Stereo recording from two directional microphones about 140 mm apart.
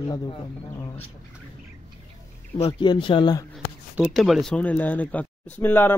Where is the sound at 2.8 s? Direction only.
35° left (ahead or behind).